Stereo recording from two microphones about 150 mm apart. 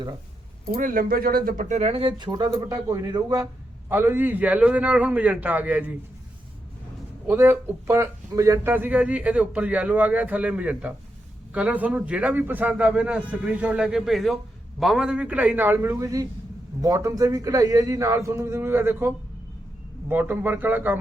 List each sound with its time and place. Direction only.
0.7 s speech: 65° right (ahead or behind); by 6.0 s 10° right (ahead or behind)
7.3 s speech: 15° right (ahead or behind)